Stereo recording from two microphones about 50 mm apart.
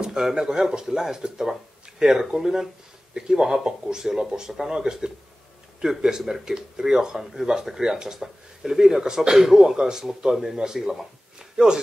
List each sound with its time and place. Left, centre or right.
0.0 s speech: centre